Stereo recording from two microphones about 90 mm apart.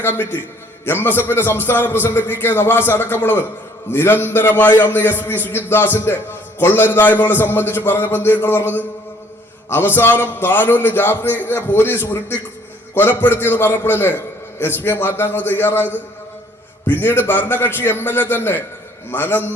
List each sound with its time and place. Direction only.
0.0 s a man's voice: 20° left (ahead or behind)